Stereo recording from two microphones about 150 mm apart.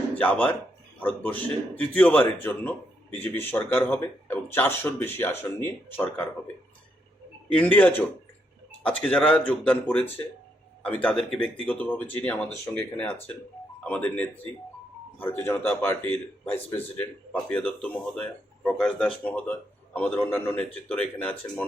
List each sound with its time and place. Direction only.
0.2 s speech: 10° left (ahead or behind)
7.5 s speech: 10° left (ahead or behind)